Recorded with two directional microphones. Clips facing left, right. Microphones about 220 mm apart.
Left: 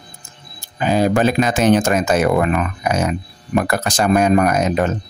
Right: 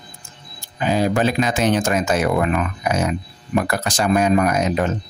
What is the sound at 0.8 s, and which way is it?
Speech, 50° left (ahead or behind).